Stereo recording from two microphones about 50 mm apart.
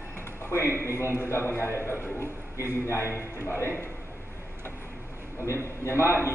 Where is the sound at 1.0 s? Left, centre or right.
Right.